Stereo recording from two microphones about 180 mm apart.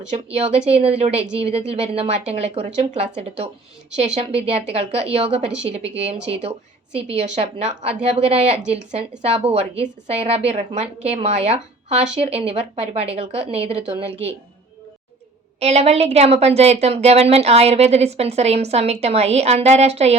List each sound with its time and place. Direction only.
0.3 s a woman's voice: 35° right (ahead or behind)
7.3 s a woman's voice: 40° right (ahead or behind)
15.6 s a woman's voice: 35° right (ahead or behind)